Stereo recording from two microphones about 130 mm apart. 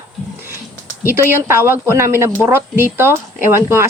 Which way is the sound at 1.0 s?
15° right (ahead or behind).